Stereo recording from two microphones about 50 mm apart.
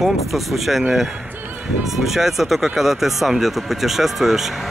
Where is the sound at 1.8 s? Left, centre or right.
Centre.